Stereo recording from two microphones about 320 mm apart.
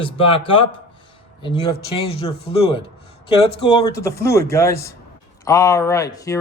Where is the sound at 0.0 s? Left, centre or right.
Centre.